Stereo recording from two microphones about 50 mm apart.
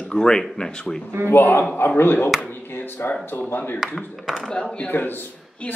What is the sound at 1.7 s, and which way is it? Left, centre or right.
Speech, left.